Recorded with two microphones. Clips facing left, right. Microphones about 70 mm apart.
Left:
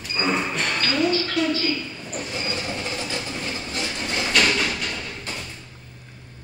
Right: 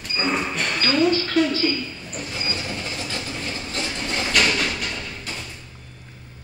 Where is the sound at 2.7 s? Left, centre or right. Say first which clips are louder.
Left 1 dB; centre.